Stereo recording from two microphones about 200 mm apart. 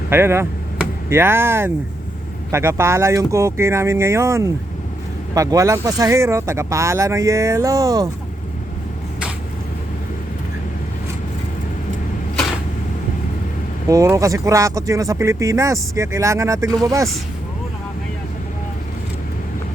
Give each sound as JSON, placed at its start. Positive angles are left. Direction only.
{"t": 0.1, "sound": "speech", "side_deg": -10}
{"t": 13.8, "sound": "speech", "side_deg": -15}